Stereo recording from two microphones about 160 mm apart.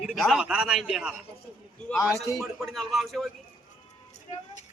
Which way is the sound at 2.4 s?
Centre (ahead or behind).